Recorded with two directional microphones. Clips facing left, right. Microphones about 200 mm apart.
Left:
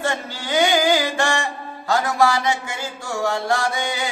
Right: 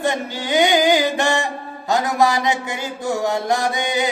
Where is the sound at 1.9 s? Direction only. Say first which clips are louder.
Right 1 dB; 20° right (ahead or behind).